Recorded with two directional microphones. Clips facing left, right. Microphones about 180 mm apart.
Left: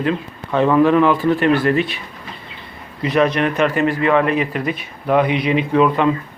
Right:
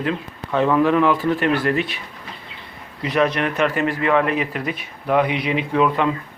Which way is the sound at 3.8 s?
5° right (ahead or behind).